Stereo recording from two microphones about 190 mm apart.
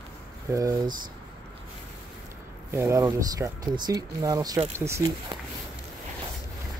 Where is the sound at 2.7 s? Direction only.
15° right (ahead or behind).